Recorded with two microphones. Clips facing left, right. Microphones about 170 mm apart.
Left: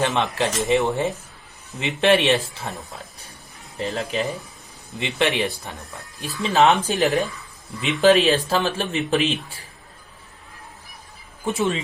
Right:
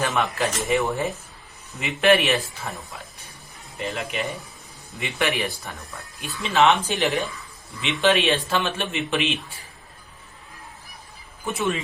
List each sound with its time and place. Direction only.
0.0 s speech: 25° left (ahead or behind)
3.8 s speech: 35° left (ahead or behind)
4.9 s speech: 20° left (ahead or behind)
6.1 s speech: 35° left (ahead or behind)